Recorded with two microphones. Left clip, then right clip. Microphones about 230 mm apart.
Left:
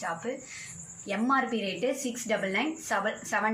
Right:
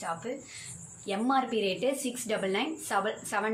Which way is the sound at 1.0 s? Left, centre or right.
Centre.